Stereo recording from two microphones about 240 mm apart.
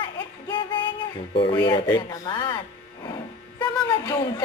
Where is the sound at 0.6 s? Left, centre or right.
Centre.